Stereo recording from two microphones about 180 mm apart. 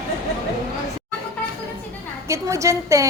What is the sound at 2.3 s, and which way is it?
Speech, 15° right (ahead or behind).